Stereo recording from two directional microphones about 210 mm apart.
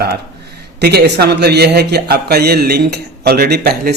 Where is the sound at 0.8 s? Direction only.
50° right (ahead or behind).